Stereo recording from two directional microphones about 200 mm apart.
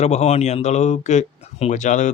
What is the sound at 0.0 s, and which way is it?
Speech, 35° left (ahead or behind).